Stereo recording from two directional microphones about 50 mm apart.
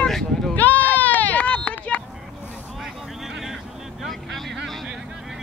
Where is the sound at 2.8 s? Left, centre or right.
Centre.